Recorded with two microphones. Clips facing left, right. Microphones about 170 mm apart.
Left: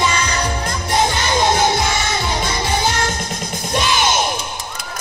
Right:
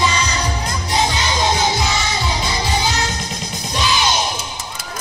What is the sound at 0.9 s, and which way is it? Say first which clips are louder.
Music: left 2 dB; 55° left (ahead or behind).